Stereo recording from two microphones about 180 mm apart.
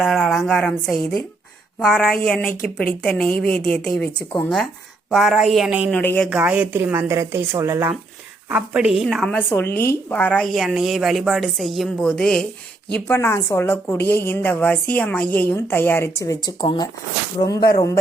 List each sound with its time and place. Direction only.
0.0 s a woman's voice: centre (ahead or behind)
1.8 s a woman's voice: 5° left (ahead or behind)
5.9 s a woman's voice: 10° left (ahead or behind)
6.3 s a woman's voice: 5° right (ahead or behind); by 18.0 s 20° left (ahead or behind)